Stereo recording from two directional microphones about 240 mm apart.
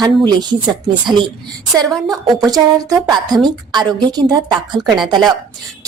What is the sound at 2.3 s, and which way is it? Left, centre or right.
A woman's voice, centre.